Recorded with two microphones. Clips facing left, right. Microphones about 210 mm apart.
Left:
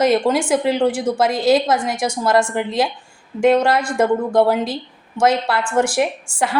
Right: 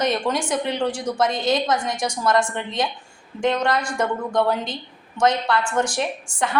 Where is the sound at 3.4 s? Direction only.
25° left (ahead or behind).